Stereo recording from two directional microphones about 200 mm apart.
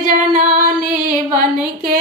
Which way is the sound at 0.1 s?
45° right (ahead or behind).